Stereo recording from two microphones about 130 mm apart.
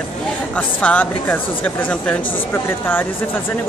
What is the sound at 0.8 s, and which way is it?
Speech, 10° left (ahead or behind).